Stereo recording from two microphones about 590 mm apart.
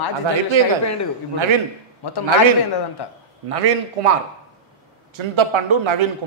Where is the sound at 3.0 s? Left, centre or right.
Left.